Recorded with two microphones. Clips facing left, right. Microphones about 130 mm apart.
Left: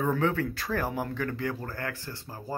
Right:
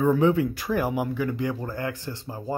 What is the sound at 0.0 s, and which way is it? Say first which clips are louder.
Speech: right 6 dB; 15° right (ahead or behind).